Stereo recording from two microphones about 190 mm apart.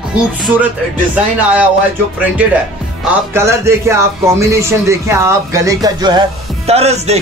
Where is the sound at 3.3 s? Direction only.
15° right (ahead or behind).